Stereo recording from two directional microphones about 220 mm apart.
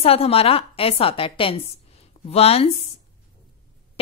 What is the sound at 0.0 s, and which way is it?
Speech, 25° left (ahead or behind).